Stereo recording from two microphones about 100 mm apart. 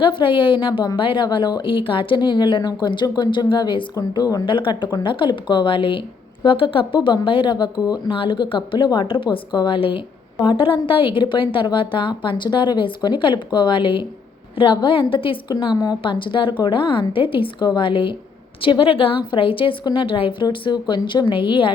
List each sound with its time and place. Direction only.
0.0 s a woman's voice: 55° left (ahead or behind)
1.6 s a woman's voice: 60° left (ahead or behind); by 4.4 s 40° left (ahead or behind)
4.4 s a woman's voice: 55° left (ahead or behind)
15.6 s a woman's voice: 45° left (ahead or behind)